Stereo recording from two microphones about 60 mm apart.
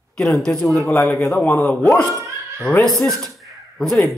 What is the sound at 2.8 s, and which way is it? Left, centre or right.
Speech, centre.